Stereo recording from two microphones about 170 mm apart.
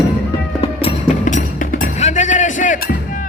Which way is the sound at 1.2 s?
50° left (ahead or behind).